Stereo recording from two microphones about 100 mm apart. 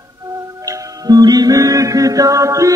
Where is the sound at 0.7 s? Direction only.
40° right (ahead or behind).